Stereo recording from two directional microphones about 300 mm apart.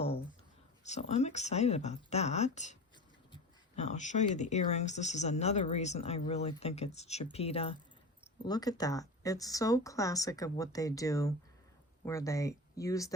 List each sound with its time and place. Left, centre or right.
0.9 s speech: left